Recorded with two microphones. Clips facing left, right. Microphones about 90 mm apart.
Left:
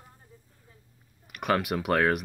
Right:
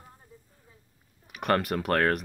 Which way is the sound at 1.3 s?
Centre (ahead or behind).